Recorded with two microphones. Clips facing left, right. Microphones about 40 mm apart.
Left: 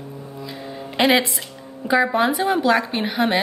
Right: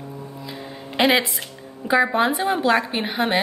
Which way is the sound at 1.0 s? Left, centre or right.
Centre.